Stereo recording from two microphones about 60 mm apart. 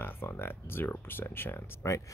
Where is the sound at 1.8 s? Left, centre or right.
Left.